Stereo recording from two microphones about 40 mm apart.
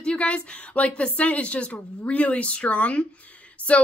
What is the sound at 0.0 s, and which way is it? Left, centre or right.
A woman's voice, left.